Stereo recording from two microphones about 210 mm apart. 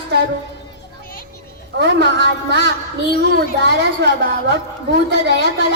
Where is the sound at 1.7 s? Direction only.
55° right (ahead or behind).